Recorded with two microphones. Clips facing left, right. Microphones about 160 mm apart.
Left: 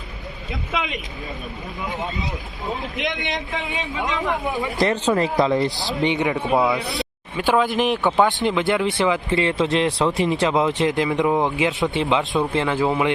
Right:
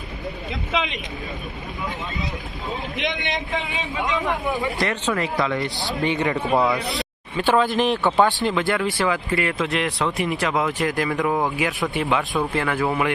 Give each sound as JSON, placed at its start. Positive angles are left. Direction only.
{"t": 3.7, "sound": "a man's voice", "side_deg": 0}
{"t": 4.8, "sound": "speech", "side_deg": 35}
{"t": 5.7, "sound": "a man's voice", "side_deg": 0}
{"t": 6.0, "sound": "speech", "side_deg": 20}
{"t": 6.2, "sound": "a man's voice", "side_deg": 0}
{"t": 6.9, "sound": "a sound", "side_deg": 5}
{"t": 7.8, "sound": "speech", "side_deg": 15}